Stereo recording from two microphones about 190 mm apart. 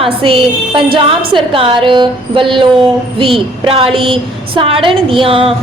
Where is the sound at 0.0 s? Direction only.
30° right (ahead or behind).